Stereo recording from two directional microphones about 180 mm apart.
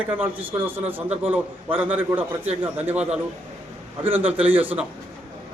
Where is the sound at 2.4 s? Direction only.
35° right (ahead or behind).